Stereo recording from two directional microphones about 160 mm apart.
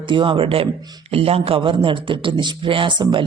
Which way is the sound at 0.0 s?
30° right (ahead or behind).